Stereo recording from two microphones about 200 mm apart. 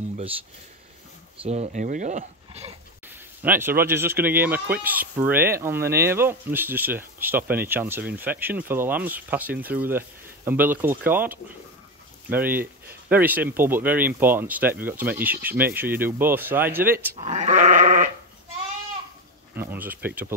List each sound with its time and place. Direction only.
1.4 s speech: 35° right (ahead or behind)
3.4 s speech: 10° right (ahead or behind)
17.2 s goat: 35° right (ahead or behind)
19.5 s speech: 10° right (ahead or behind)